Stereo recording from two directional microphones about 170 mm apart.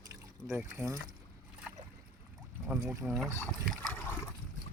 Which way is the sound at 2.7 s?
5° right (ahead or behind).